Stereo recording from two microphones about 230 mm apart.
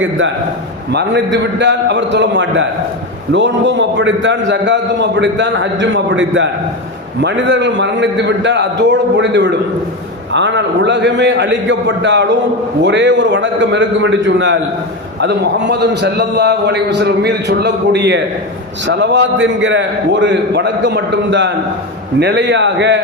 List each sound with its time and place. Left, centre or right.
0.9 s a man's voice: right